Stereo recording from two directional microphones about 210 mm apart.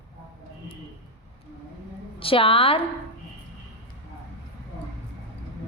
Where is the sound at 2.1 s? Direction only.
25° left (ahead or behind).